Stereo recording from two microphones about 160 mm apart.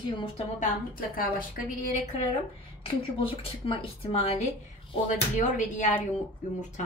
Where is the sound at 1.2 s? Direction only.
60° left (ahead or behind).